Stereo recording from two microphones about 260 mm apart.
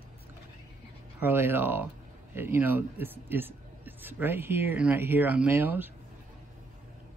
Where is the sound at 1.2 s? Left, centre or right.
Centre.